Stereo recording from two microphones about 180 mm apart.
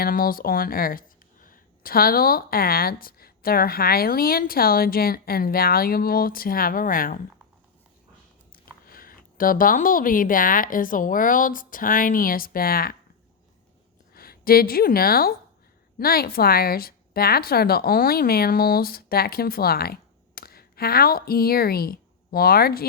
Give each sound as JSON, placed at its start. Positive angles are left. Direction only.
{"t": 0.0, "sound": "speech", "side_deg": 55}
{"t": 8.5, "sound": "speech", "side_deg": 55}
{"t": 14.1, "sound": "a woman's voice", "side_deg": 55}